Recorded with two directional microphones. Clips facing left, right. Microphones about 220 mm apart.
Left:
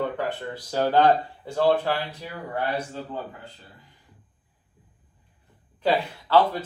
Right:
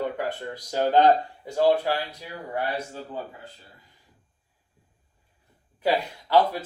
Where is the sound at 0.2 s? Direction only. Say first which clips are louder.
Left 1 dB; 15° right (ahead or behind).